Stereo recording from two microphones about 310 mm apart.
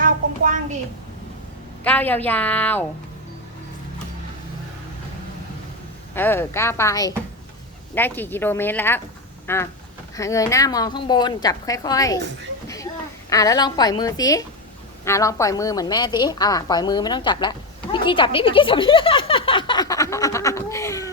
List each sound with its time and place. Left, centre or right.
0.0 s a sound: right
1.8 s a woman's voice: centre
6.1 s a woman's voice: centre
12.6 s a sound: centre
13.3 s a woman's voice: centre
19.5 s laughter: centre